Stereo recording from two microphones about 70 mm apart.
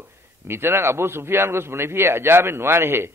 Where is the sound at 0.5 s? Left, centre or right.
Right.